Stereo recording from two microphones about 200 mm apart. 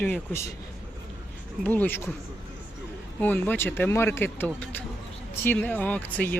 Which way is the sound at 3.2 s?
10° left (ahead or behind).